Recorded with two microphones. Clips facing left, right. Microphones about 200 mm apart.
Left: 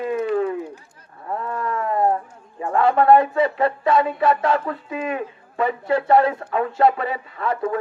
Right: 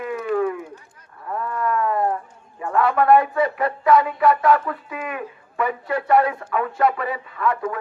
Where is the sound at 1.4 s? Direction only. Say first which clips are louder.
Right 4 dB; 30° left (ahead or behind).